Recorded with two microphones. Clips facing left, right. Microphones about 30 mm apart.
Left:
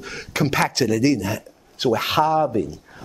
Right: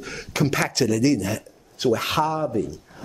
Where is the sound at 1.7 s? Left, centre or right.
Left.